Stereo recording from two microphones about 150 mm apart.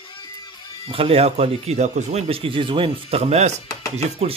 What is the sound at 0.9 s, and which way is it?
Speech, 40° right (ahead or behind).